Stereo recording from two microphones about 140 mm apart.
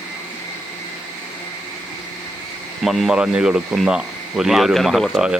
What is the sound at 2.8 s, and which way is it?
Speech, centre (ahead or behind).